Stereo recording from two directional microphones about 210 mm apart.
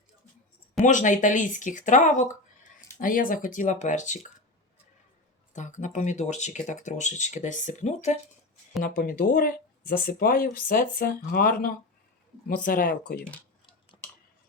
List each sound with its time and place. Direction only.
0.8 s speech: 35° left (ahead or behind)
5.5 s speech: 35° left (ahead or behind)